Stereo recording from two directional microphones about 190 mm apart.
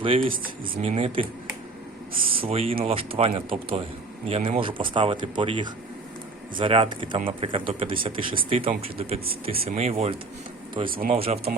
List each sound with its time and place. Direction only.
0.0 s speech: 30° right (ahead or behind)
2.3 s speech: 30° right (ahead or behind)
10.8 s speech: 50° right (ahead or behind)
11.1 s speech: 35° right (ahead or behind)